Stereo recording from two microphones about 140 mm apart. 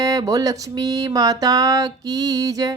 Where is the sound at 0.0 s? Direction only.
25° right (ahead or behind).